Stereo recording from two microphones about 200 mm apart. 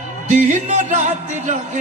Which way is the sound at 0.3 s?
40° right (ahead or behind).